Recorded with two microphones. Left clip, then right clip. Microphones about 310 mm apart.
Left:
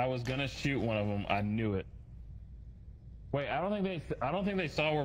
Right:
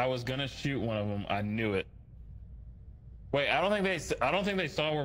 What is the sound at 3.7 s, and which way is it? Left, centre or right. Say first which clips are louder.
Speech: right 6 dB; right.